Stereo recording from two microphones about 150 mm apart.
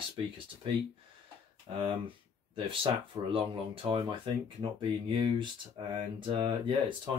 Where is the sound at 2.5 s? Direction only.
35° right (ahead or behind).